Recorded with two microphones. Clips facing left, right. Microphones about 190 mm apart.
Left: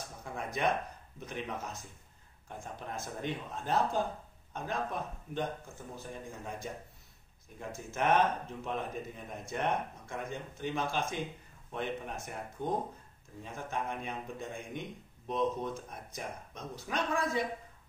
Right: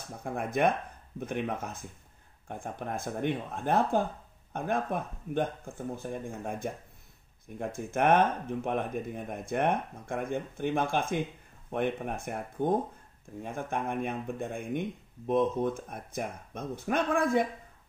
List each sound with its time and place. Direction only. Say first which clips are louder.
0.2 s speech: right 6 dB; 55° right (ahead or behind)
7.5 s speech: right 7 dB; 55° right (ahead or behind)